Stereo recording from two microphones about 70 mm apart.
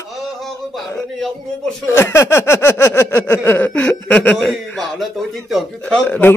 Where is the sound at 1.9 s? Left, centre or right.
Left.